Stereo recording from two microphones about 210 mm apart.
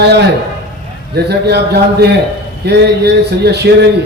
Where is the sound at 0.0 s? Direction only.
50° right (ahead or behind).